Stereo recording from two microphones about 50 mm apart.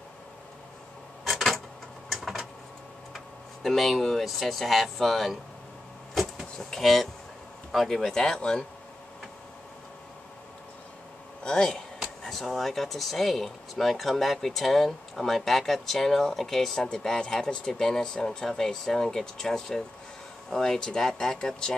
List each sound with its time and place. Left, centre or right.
1.2 s a sound: centre
3.6 s speech: centre
6.7 s speech: centre
11.4 s speech: centre
12.2 s speech: centre